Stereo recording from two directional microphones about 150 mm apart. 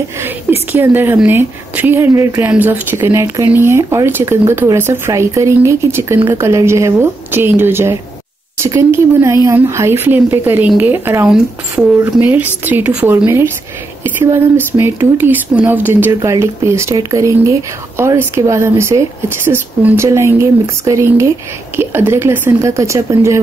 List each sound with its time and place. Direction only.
0.2 s a woman's voice: 15° right (ahead or behind)